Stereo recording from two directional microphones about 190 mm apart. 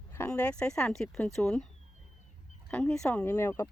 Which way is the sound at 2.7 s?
5° left (ahead or behind).